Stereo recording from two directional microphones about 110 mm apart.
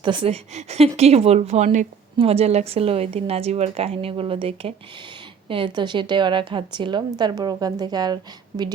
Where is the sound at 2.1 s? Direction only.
65° right (ahead or behind).